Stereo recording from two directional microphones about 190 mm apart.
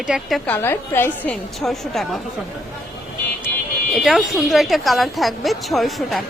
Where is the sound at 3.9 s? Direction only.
Centre (ahead or behind).